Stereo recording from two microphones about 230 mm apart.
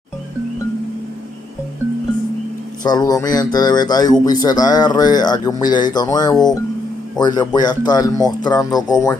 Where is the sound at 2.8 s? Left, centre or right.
Centre.